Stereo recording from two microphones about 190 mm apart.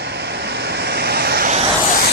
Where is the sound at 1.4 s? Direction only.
35° right (ahead or behind).